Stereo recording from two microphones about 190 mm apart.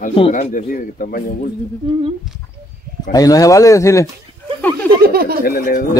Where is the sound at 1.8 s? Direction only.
30° right (ahead or behind).